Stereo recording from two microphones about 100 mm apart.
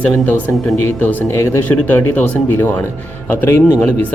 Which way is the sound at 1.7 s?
15° left (ahead or behind).